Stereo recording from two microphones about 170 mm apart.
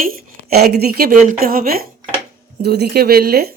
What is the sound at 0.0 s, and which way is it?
Speech, 65° right (ahead or behind).